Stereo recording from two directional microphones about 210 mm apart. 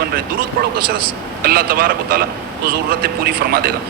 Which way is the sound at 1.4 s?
45° right (ahead or behind).